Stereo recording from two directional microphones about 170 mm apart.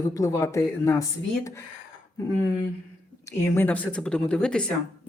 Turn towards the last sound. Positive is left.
turn(degrees=5)  # may be behind; listen again after turning